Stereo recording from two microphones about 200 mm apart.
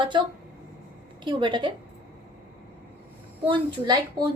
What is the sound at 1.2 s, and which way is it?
Speech, 25° right (ahead or behind).